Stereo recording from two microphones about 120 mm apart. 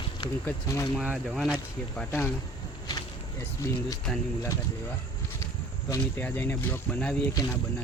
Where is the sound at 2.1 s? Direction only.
20° left (ahead or behind).